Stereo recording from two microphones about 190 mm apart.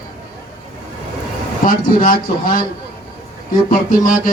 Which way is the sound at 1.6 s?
45° left (ahead or behind).